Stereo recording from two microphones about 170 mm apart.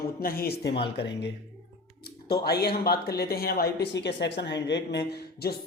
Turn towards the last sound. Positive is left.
turn(degrees=70)  # may be behind; listen again after turning